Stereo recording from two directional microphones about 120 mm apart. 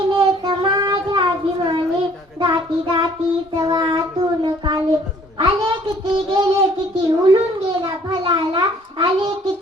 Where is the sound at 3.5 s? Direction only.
40° right (ahead or behind).